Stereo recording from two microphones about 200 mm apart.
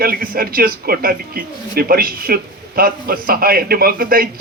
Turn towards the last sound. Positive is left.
turn(degrees=-45)  # may be behind; listen again after turning